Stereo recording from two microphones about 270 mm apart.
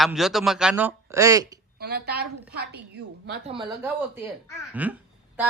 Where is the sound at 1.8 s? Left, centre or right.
Right.